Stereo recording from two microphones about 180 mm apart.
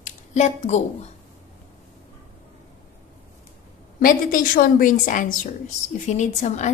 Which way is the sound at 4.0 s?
50° left (ahead or behind).